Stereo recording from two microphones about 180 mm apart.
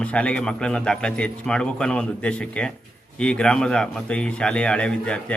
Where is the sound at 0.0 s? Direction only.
5° left (ahead or behind).